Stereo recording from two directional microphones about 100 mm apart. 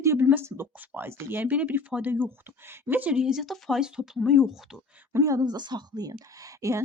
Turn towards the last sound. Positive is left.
turn(degrees=-30)  # may be behind; listen again after turning